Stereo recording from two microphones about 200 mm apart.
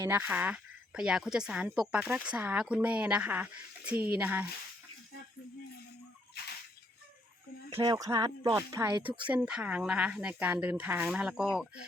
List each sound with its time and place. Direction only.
0.0 s speech: 10° right (ahead or behind)
7.7 s speech: 20° right (ahead or behind)
9.0 s speech: 5° right (ahead or behind)